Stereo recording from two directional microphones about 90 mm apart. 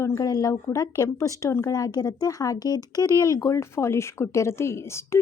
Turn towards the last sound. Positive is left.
turn(degrees=30)  # may be behind; listen again after turning